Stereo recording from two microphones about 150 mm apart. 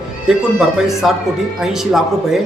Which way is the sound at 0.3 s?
5° right (ahead or behind).